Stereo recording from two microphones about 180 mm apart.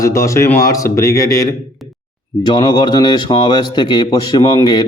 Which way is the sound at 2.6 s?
25° left (ahead or behind).